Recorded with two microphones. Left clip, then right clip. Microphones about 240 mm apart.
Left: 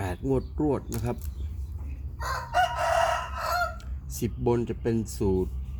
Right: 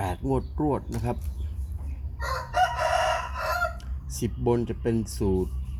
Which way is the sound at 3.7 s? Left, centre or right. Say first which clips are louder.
Right 1 dB; centre.